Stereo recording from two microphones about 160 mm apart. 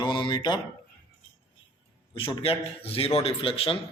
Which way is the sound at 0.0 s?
30° left (ahead or behind).